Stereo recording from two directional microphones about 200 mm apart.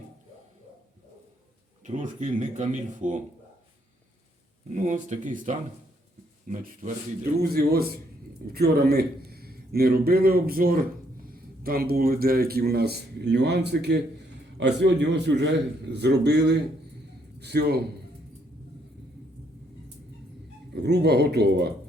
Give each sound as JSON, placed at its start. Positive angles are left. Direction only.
{"t": 1.8, "sound": "speech", "side_deg": -40}
{"t": 4.7, "sound": "a man's voice", "side_deg": -35}
{"t": 20.7, "sound": "speech", "side_deg": -55}